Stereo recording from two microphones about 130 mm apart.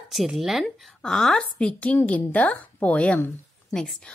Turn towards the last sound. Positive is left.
turn(degrees=5)  # may be behind; listen again after turning